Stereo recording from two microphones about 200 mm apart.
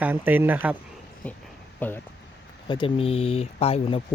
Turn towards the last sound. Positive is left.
turn(degrees=30)  # may be behind; listen again after turning